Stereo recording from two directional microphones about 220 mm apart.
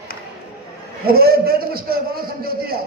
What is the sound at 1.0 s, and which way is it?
A man's voice, 45° right (ahead or behind).